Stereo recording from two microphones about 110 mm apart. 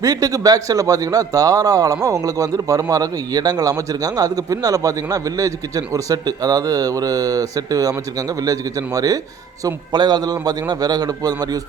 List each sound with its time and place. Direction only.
0.0 s a man's voice: 35° right (ahead or behind)